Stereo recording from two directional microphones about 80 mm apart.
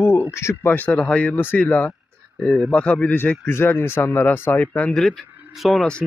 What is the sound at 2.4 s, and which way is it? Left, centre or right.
Speech, centre.